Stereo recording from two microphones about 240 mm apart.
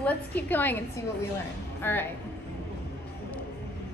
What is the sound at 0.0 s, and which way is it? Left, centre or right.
A woman's voice, centre.